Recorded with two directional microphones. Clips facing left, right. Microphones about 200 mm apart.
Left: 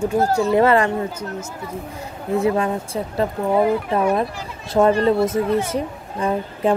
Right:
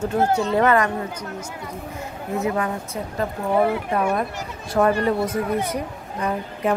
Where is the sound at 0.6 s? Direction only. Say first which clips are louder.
Left 3 dB; 25° left (ahead or behind).